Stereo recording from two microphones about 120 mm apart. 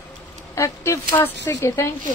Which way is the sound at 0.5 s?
25° left (ahead or behind).